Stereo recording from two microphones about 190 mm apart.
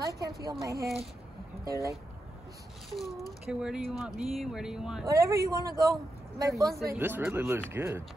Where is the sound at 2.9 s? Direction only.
Centre (ahead or behind).